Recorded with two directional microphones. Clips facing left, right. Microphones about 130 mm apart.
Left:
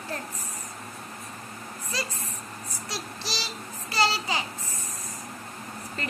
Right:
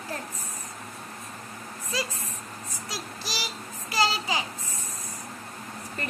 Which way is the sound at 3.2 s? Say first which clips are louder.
Even; 15° right (ahead or behind).